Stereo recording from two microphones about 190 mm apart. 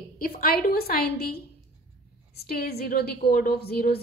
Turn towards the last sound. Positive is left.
turn(degrees=55)  # may be behind; listen again after turning